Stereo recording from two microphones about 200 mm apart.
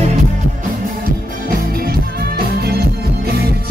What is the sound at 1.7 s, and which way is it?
Music, 50° right (ahead or behind).